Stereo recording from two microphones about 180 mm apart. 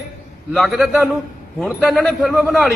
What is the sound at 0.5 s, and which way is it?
A man's voice, centre (ahead or behind).